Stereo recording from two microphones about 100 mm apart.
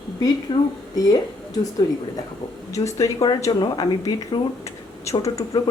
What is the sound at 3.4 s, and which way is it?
Speech, 45° left (ahead or behind).